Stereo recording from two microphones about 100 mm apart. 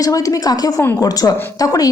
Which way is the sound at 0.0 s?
35° left (ahead or behind).